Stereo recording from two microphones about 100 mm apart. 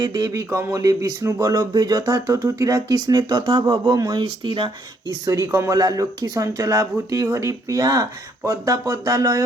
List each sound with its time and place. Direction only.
0.0 s speech: 40° right (ahead or behind)
5.0 s speech: 30° right (ahead or behind)